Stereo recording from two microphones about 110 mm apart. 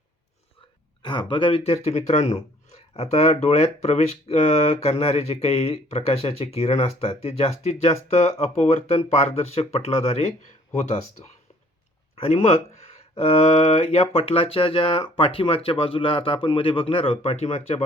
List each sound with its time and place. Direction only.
1.0 s speech: 45° left (ahead or behind); by 2.4 s 85° left
2.9 s speech: 65° left (ahead or behind)
10.8 s speech: 90° left
12.1 s speech: 75° left (ahead or behind)